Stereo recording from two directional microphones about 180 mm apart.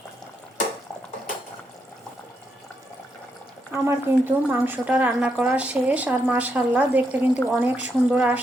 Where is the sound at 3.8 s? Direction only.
10° right (ahead or behind).